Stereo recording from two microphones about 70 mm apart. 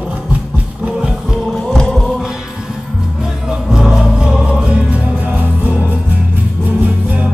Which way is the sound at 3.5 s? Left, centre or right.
Centre.